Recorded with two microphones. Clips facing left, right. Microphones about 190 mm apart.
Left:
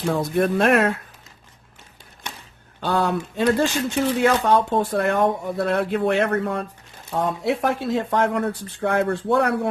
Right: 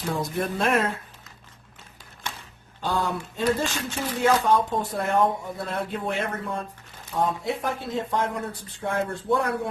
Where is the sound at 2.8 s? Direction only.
70° left (ahead or behind).